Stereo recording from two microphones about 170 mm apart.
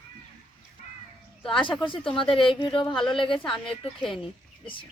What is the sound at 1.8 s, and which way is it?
Speech, 30° left (ahead or behind).